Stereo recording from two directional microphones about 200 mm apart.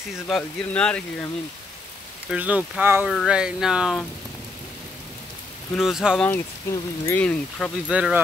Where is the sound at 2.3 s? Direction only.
5° right (ahead or behind).